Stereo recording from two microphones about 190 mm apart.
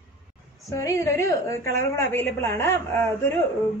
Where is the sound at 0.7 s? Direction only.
15° left (ahead or behind).